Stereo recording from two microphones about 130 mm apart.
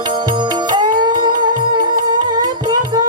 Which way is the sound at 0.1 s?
35° right (ahead or behind).